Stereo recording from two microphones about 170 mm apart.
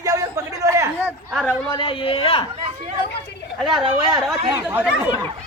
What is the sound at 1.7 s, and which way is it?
Speech, 30° left (ahead or behind).